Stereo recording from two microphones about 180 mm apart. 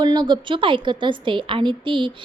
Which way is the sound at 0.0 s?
25° right (ahead or behind).